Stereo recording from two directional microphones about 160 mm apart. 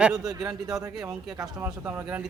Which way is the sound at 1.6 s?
10° right (ahead or behind).